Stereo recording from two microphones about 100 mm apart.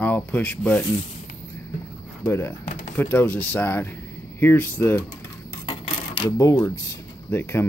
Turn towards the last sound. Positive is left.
turn(degrees=25)  # may be behind; listen again after turning